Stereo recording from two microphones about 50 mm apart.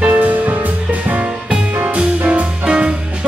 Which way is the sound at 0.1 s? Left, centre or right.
Right.